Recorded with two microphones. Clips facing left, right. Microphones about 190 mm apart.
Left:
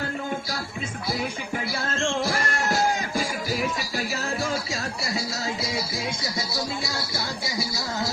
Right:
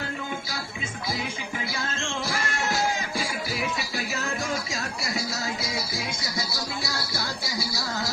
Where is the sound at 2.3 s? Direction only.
40° left (ahead or behind).